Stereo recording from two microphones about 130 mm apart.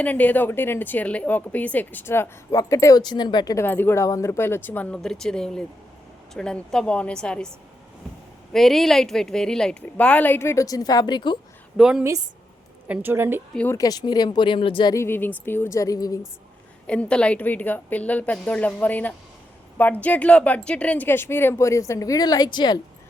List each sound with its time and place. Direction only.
0.0 s a woman's voice: 10° left (ahead or behind); by 3.7 s 25° left (ahead or behind)
3.7 s a woman's voice: 15° left (ahead or behind)
8.5 s a woman's voice: centre (ahead or behind); by 11.3 s 35° left (ahead or behind)
11.8 s a woman's voice: 5° right (ahead or behind)
13.7 s speech: 25° left (ahead or behind)
14.9 s a woman's voice: 20° left (ahead or behind)
16.8 s a woman's voice: 10° left (ahead or behind); by 22.8 s 35° left (ahead or behind)